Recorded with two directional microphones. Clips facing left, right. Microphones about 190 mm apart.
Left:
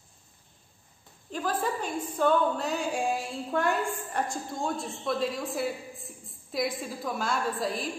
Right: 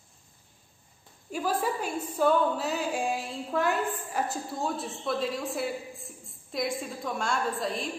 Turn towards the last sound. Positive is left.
turn(degrees=0)  # may be behind; listen again after turning